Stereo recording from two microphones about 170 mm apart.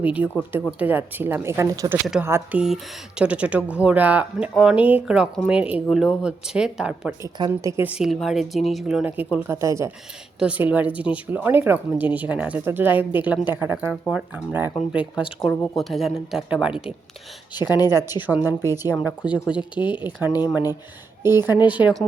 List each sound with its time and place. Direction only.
0.0 s speech: 10° right (ahead or behind)
7.2 s speech: 20° right (ahead or behind); by 16.9 s 5° right (ahead or behind)
17.7 s speech: 20° left (ahead or behind)
18.2 s speech: 10° right (ahead or behind)
21.2 s speech: 15° right (ahead or behind)